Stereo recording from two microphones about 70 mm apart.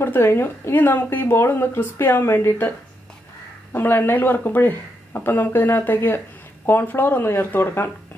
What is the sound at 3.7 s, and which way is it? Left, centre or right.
Speech, left.